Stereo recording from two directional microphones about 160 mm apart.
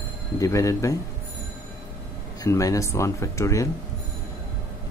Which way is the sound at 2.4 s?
20° left (ahead or behind).